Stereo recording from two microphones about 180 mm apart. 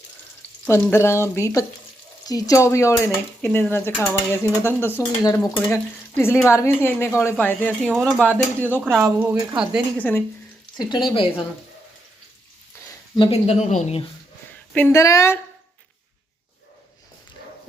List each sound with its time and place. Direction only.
0.7 s speech: 15° left (ahead or behind)
7.9 s speech: 5° right (ahead or behind)
9.0 s speech: 15° right (ahead or behind)
10.0 s speech: 10° left (ahead or behind)
10.8 s speech: 25° left (ahead or behind)
12.9 s speech: 30° left (ahead or behind)
14.7 s speech: 10° left (ahead or behind)